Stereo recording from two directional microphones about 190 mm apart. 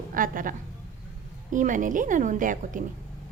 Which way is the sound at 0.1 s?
45° right (ahead or behind).